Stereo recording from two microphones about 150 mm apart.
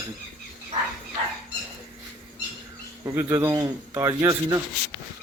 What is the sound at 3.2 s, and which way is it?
Speech, 15° right (ahead or behind).